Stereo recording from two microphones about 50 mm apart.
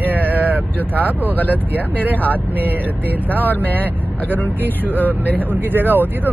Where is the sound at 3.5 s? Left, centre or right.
Left.